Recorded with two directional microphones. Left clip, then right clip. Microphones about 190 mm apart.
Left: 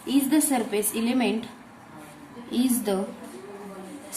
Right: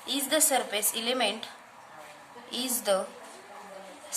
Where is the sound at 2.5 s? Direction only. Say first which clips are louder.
Left 2 dB; 15° right (ahead or behind).